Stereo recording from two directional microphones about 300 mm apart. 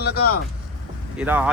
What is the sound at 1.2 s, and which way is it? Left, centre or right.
Speech, centre.